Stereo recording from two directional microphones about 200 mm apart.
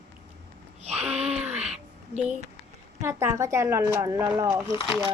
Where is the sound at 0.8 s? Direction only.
30° right (ahead or behind).